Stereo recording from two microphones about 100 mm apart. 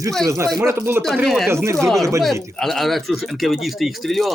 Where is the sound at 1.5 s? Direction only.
25° right (ahead or behind).